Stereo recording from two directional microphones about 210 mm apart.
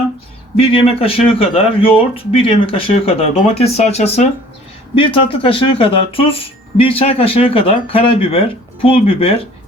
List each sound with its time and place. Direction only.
0.5 s speech: 25° left (ahead or behind)